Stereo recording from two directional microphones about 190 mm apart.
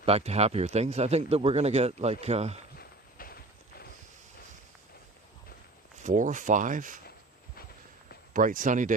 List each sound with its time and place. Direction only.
0.0 s speech: 30° right (ahead or behind)
2.7 s a sound: 50° left (ahead or behind)
6.0 s speech: 40° right (ahead or behind)
8.3 s speech: 45° right (ahead or behind)